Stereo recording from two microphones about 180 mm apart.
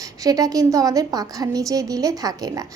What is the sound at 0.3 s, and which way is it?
A woman's voice, 20° right (ahead or behind).